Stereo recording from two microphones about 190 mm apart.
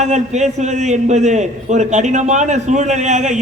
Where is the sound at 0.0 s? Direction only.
35° right (ahead or behind).